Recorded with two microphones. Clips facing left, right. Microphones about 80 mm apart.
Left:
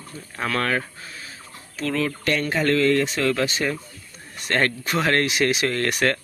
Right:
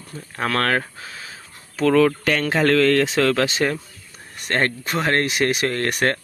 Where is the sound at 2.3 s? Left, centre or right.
Right.